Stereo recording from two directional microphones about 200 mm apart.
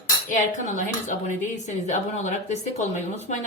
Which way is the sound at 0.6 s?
40° left (ahead or behind).